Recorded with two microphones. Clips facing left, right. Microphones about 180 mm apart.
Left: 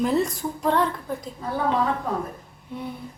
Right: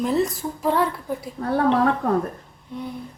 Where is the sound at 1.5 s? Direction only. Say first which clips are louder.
Right 5 dB; 70° right (ahead or behind).